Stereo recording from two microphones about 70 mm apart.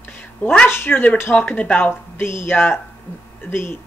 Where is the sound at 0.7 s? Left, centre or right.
Left.